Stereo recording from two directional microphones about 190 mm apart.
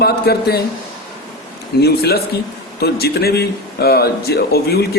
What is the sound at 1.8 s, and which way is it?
A man's voice, 55° left (ahead or behind).